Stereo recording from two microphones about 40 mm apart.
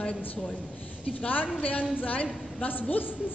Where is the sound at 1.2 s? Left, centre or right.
Left.